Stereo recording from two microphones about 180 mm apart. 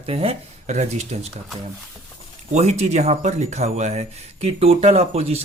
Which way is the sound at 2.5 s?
35° right (ahead or behind).